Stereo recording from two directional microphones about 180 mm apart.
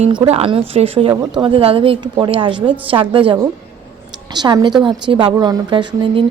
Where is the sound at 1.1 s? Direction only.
20° right (ahead or behind).